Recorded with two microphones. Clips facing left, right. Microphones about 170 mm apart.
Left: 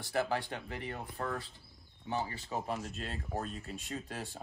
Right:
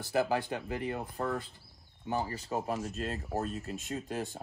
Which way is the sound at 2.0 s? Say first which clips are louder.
Right 3 dB; 40° right (ahead or behind).